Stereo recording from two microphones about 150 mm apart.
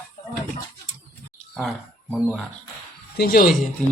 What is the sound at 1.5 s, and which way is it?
Speech, 5° right (ahead or behind).